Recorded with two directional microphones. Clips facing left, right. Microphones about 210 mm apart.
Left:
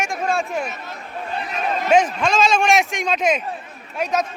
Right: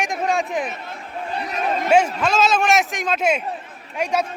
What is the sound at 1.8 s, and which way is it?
Speech, 10° right (ahead or behind).